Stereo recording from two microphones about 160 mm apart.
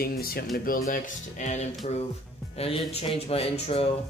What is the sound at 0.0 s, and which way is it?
Speech, 70° left (ahead or behind).